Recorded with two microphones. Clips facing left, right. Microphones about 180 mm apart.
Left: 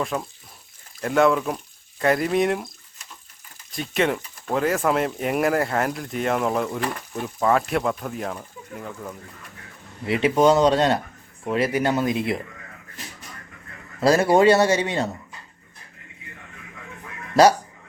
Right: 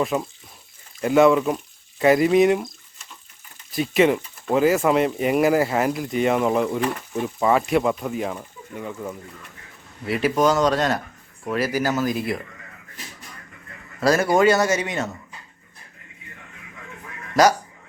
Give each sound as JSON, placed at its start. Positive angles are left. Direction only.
{"t": 0.0, "sound": "speech", "side_deg": 0}
{"t": 3.7, "sound": "speech", "side_deg": -5}
{"t": 10.1, "sound": "speech", "side_deg": 25}
{"t": 14.0, "sound": "speech", "side_deg": 30}